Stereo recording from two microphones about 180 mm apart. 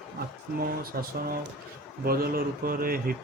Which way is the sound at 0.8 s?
55° right (ahead or behind).